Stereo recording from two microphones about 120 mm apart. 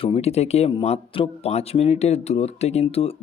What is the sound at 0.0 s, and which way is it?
Speech, 55° left (ahead or behind).